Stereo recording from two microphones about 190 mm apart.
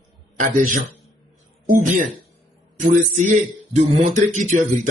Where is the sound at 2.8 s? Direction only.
40° right (ahead or behind).